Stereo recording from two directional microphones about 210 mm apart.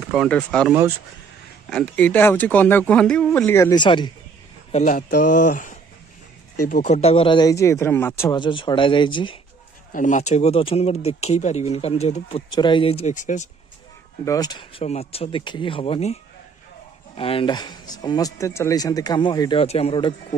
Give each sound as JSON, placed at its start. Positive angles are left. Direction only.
{"t": 0.1, "sound": "speech", "side_deg": 0}
{"t": 3.8, "sound": "speech", "side_deg": 25}
{"t": 4.7, "sound": "speech", "side_deg": 35}
{"t": 9.9, "sound": "speech", "side_deg": 35}
{"t": 14.2, "sound": "speech", "side_deg": 15}
{"t": 17.2, "sound": "speech", "side_deg": 25}